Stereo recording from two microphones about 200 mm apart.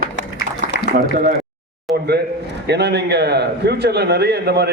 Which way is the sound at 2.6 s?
55° right (ahead or behind).